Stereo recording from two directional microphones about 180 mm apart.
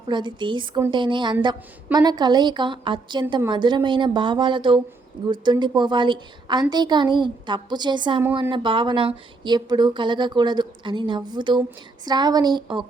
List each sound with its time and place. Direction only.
0.1 s a woman's voice: 25° right (ahead or behind)